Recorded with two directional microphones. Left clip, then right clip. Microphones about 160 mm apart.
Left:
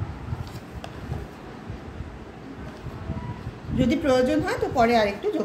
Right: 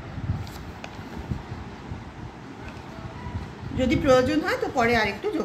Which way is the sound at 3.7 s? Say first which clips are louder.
Right 2 dB; 20° left (ahead or behind).